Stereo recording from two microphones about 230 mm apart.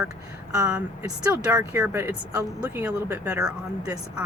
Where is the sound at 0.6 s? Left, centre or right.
Centre.